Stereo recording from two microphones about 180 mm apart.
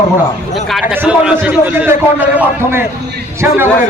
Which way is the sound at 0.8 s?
10° right (ahead or behind).